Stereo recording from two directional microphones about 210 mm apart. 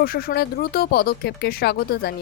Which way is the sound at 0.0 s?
45° left (ahead or behind).